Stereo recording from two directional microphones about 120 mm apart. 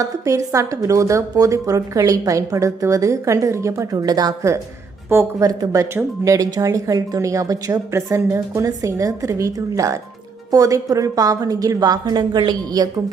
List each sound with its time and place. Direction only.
0.0 s a woman's voice: 25° right (ahead or behind)
5.5 s a woman's voice: 30° right (ahead or behind)